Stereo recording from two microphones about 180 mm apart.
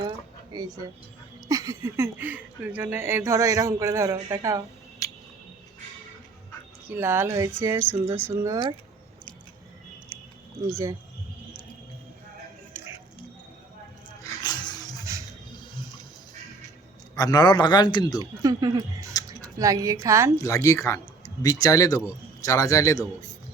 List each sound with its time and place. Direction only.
0.5 s speech: 20° right (ahead or behind)
5.0 s a sound: 20° left (ahead or behind)
6.8 s speech: 15° right (ahead or behind)
10.1 s a sound: 30° left (ahead or behind)
10.7 s speech: 15° right (ahead or behind)
14.2 s music: 20° left (ahead or behind)
17.2 s a man's voice: 20° left (ahead or behind)
18.4 s speech: 20° right (ahead or behind)
20.3 s speech: 15° left (ahead or behind)